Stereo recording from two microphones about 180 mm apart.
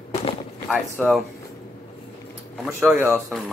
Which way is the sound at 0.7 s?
Centre (ahead or behind).